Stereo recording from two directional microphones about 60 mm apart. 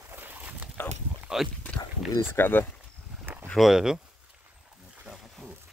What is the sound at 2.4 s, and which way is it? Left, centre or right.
Speech, left.